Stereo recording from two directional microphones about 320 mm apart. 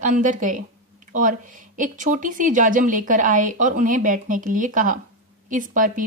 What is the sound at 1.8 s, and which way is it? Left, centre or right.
A woman's voice, right.